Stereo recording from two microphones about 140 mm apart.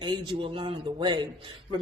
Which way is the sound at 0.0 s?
35° right (ahead or behind).